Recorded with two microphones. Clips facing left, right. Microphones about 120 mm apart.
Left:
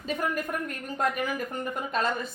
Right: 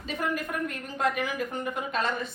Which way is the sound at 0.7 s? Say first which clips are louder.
Even; 45° left (ahead or behind).